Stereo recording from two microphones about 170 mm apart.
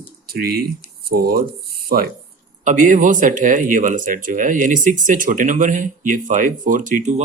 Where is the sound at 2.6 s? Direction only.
50° right (ahead or behind).